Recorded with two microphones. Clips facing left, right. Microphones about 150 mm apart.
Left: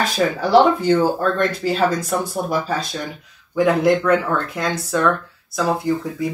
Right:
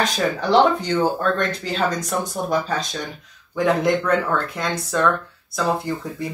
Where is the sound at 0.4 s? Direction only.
5° left (ahead or behind).